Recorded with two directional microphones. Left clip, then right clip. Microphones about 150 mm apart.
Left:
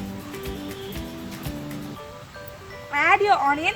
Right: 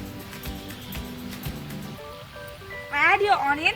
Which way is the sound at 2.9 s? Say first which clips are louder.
Left 2 dB; 60° left (ahead or behind).